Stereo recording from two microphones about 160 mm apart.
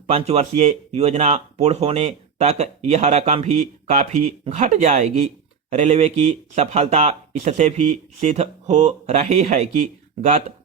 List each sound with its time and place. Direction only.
0.1 s speech: 40° right (ahead or behind)